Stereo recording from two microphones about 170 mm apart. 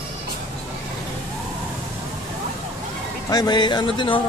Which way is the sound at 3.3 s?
25° left (ahead or behind).